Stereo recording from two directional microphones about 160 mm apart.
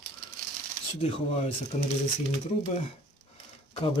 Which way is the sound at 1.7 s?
45° left (ahead or behind).